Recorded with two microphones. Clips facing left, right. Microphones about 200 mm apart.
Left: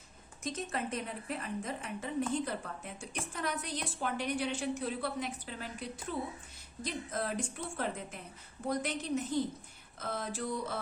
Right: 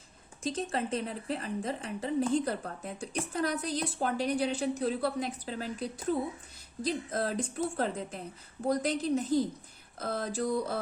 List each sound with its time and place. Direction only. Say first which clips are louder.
0.4 s a woman's voice: right 5 dB; 30° right (ahead or behind)